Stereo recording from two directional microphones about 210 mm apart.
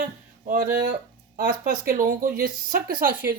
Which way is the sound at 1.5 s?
40° right (ahead or behind).